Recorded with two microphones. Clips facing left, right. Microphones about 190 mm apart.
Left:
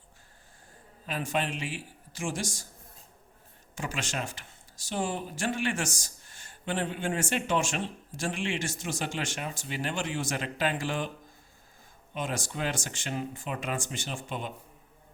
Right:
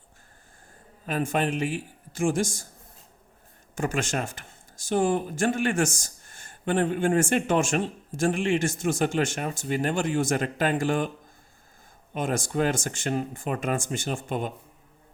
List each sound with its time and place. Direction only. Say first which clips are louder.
1.0 s speech: right 5 dB; 50° right (ahead or behind)
3.8 s speech: right 7 dB; 50° right (ahead or behind)
12.1 s speech: right 7 dB; 50° right (ahead or behind)